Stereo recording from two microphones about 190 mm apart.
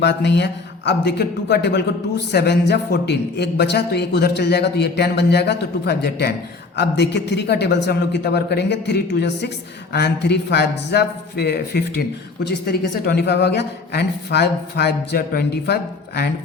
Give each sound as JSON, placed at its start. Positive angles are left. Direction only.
{"t": 0.0, "sound": "speech", "side_deg": 65}